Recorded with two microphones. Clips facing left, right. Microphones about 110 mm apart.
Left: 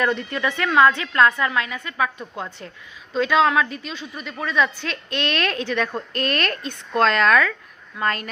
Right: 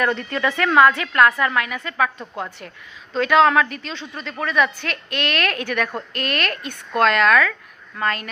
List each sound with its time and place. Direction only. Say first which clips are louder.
0.2 s a woman's voice: right 2 dB; 20° left (ahead or behind)
0.7 s a woman's voice: right 1 dB; 15° right (ahead or behind)
0.9 s a woman's voice: right 1 dB; 25° left (ahead or behind)
2.1 s a woman's voice: right 2 dB; 20° right (ahead or behind)
3.2 s a woman's voice: right 3 dB; 20° left (ahead or behind); by 8.3 s 35° left (ahead or behind)